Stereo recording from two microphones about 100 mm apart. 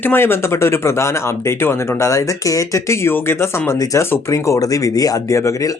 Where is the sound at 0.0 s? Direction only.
20° left (ahead or behind).